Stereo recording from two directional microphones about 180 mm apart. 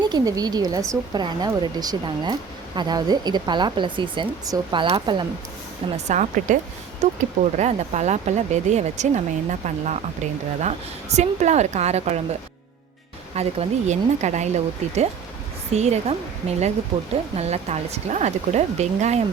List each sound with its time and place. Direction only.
0.0 s a woman's voice: 20° right (ahead or behind)
6.1 s speech: 45° right (ahead or behind)
13.3 s speech: 35° right (ahead or behind)